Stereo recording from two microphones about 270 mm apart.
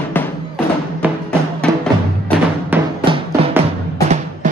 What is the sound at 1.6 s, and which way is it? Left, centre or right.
Music, centre.